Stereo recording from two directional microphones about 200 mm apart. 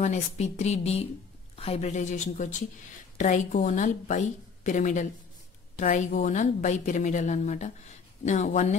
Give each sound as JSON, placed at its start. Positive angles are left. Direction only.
{"t": 0.0, "sound": "a woman's voice", "side_deg": 35}